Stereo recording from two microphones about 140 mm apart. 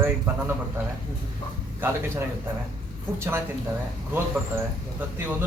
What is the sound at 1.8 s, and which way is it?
Speech, 15° right (ahead or behind).